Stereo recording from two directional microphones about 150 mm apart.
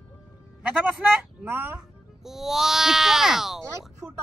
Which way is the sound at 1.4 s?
15° right (ahead or behind).